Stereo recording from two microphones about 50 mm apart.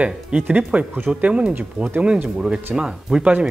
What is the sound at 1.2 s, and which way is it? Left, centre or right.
Speech, right.